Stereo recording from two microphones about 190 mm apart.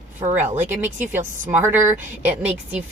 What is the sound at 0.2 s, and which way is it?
Speech, 35° right (ahead or behind).